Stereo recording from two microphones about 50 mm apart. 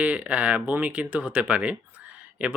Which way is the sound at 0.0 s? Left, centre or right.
Right.